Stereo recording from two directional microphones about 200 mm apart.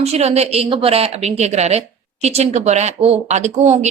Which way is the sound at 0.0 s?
30° right (ahead or behind).